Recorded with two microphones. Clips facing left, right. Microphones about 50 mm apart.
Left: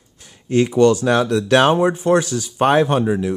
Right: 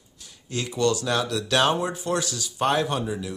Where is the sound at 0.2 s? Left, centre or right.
Left.